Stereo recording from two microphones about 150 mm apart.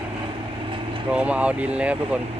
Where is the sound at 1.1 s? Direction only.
10° right (ahead or behind).